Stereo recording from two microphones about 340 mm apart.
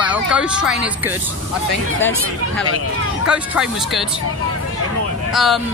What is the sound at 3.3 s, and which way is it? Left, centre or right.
Speech, centre.